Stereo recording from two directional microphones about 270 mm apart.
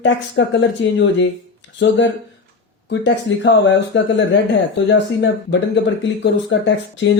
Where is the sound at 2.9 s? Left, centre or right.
Left.